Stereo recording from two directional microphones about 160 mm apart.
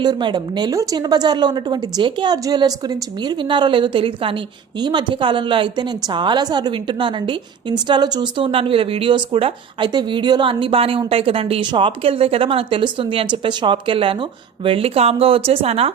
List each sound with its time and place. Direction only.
0.0 s a woman's voice: 30° right (ahead or behind)